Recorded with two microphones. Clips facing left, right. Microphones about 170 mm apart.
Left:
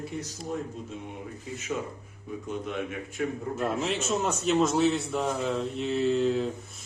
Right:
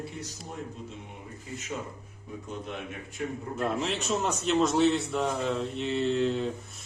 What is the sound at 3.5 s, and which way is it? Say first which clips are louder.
Speech: even; centre (ahead or behind).